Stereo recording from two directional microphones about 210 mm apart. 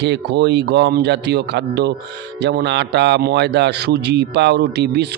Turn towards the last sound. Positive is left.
turn(degrees=-50)  # may be behind; listen again after turning